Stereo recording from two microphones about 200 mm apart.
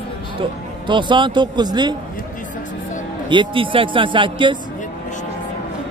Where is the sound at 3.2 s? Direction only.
25° right (ahead or behind).